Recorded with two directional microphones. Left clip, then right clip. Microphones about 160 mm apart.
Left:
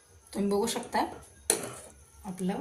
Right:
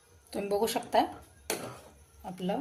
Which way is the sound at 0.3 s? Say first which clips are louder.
Even; 85° right.